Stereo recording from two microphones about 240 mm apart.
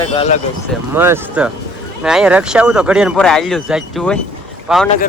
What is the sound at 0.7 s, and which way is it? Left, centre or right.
Speech, centre.